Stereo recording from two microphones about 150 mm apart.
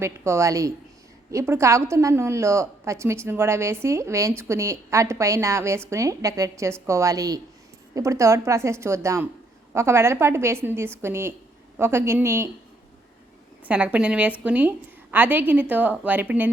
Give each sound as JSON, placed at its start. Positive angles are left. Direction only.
{"t": 0.0, "sound": "a woman's voice", "side_deg": -20}
{"t": 13.7, "sound": "a woman's voice", "side_deg": -10}